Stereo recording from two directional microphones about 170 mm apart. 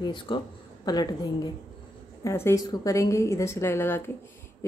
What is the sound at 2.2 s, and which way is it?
A woman's voice, 15° left (ahead or behind).